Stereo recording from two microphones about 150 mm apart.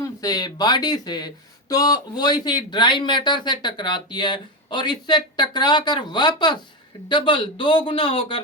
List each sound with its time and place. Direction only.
0.0 s speech: 25° left (ahead or behind)